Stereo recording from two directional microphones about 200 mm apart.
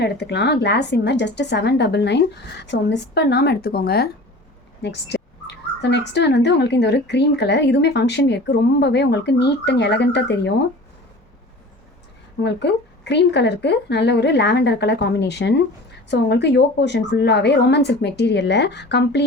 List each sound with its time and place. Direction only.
0.0 s speech: 55° left (ahead or behind)
12.4 s speech: 60° left (ahead or behind)